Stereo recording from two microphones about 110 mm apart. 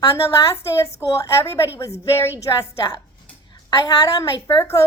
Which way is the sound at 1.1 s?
25° left (ahead or behind).